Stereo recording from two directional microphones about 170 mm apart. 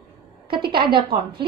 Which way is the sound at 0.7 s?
65° right (ahead or behind).